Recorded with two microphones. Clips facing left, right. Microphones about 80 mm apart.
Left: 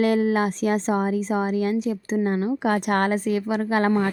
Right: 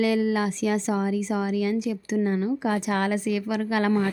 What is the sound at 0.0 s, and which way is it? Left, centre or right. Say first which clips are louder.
Speech: left 3 dB; left.